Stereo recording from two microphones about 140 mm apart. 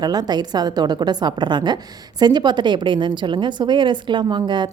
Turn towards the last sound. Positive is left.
turn(degrees=-35)  # may be behind; listen again after turning